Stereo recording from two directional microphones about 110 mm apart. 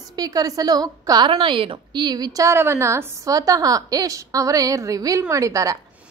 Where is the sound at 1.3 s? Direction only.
55° right (ahead or behind); by 2.5 s 35° right (ahead or behind).